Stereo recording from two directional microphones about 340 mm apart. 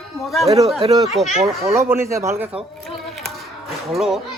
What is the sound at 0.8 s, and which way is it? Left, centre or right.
Speech, centre.